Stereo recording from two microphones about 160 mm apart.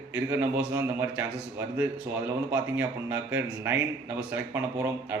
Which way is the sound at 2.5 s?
10° right (ahead or behind).